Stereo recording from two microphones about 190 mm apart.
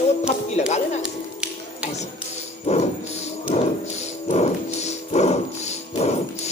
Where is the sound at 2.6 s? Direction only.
35° left (ahead or behind).